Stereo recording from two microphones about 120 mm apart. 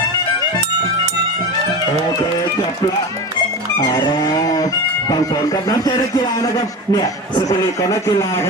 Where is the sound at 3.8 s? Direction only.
30° left (ahead or behind).